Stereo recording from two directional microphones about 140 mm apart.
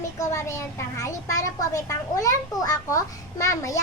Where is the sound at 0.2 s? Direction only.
20° left (ahead or behind).